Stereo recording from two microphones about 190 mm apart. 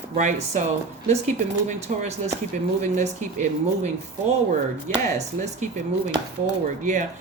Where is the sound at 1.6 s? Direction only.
35° right (ahead or behind).